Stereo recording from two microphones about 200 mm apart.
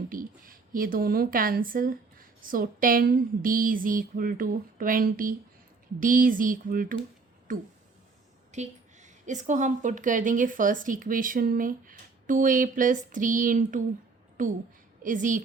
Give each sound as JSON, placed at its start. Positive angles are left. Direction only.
{"t": 0.1, "sound": "a woman's voice", "side_deg": -45}